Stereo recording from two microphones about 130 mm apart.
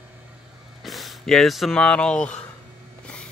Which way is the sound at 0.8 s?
Centre (ahead or behind).